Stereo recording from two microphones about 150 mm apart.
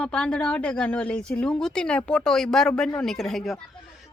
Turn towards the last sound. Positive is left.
turn(degrees=0)  # may be behind; listen again after turning